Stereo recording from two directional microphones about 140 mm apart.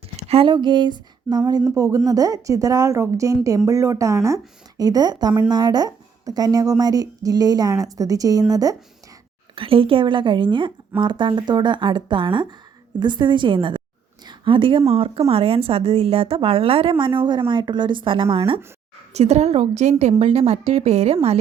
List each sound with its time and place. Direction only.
0.2 s a woman's voice: 45° right (ahead or behind); by 8.7 s 25° right (ahead or behind)
9.6 s speech: 40° right (ahead or behind)
19.1 s a woman's voice: 50° right (ahead or behind)